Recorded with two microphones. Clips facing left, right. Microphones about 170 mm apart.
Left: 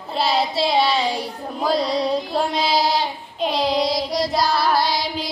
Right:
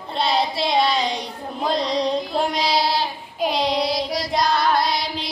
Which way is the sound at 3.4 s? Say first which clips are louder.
Left 1 dB; centre (ahead or behind).